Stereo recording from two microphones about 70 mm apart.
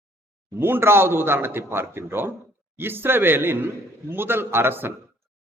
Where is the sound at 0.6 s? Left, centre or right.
Right.